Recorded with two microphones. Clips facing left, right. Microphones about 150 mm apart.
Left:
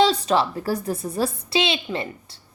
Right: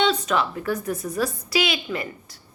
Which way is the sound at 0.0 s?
35° left (ahead or behind).